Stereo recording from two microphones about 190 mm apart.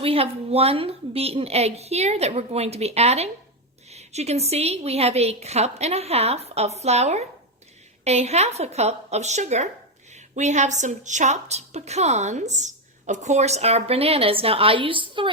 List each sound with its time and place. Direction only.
0.0 s a woman's voice: 30° right (ahead or behind)